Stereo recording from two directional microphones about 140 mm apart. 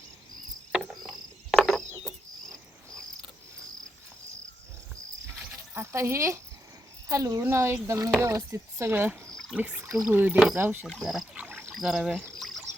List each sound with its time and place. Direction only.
0.7 s cricket: centre (ahead or behind)
5.5 s speech: 20° right (ahead or behind)
9.3 s a sound: 5° left (ahead or behind)
9.6 s speech: 15° right (ahead or behind)
10.8 s speech: centre (ahead or behind)
11.4 s rowboat: 15° right (ahead or behind)
11.7 s pour: 5° right (ahead or behind)